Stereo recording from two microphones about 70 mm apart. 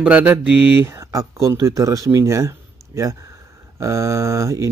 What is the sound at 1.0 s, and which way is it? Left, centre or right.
A man's voice, right.